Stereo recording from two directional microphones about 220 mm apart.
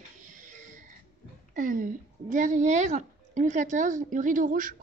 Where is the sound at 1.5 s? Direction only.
35° right (ahead or behind).